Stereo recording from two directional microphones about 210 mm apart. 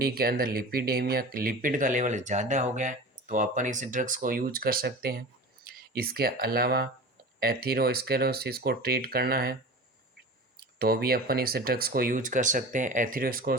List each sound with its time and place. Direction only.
0.0 s speech: 45° right (ahead or behind)
10.6 s speech: 45° right (ahead or behind)